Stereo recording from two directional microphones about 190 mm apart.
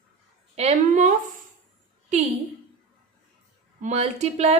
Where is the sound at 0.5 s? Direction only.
35° right (ahead or behind).